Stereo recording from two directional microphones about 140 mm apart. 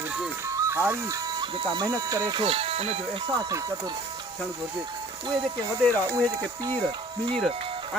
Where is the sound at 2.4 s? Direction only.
45° right (ahead or behind).